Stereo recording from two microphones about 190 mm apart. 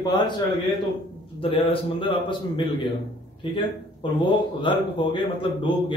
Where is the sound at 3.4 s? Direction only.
25° left (ahead or behind).